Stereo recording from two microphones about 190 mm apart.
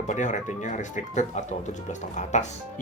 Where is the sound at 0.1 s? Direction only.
40° left (ahead or behind).